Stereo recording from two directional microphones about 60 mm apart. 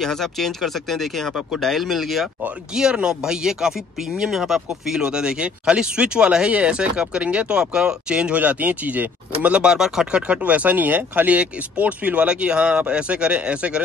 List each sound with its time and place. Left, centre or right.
0.0 s speech: centre
2.7 s speech: centre
10.2 s speech: right